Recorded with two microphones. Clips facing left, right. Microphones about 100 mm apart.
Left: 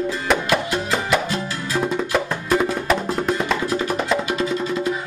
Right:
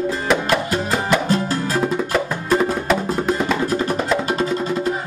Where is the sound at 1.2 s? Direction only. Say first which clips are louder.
Right 6 dB; 40° right (ahead or behind).